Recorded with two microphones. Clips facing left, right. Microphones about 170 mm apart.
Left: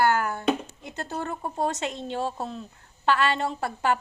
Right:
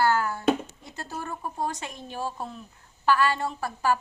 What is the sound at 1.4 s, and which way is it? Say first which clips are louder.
A woman's voice: left 4 dB; 25° left (ahead or behind).